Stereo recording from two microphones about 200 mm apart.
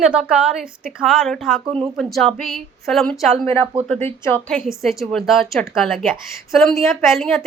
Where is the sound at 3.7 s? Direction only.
25° right (ahead or behind).